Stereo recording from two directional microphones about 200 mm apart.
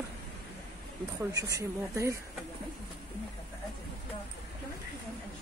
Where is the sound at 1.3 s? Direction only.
15° right (ahead or behind).